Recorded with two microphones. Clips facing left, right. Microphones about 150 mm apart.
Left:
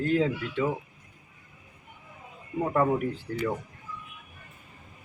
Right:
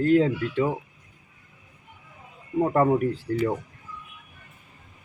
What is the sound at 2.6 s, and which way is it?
Speech, 35° right (ahead or behind).